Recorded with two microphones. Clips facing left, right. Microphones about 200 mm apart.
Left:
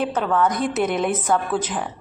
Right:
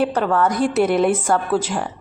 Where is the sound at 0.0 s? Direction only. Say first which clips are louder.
Right 2 dB; centre (ahead or behind).